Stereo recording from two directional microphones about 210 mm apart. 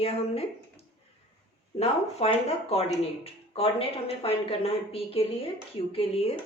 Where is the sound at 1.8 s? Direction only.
30° left (ahead or behind).